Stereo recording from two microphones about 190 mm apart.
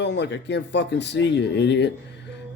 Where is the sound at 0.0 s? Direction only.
65° left (ahead or behind).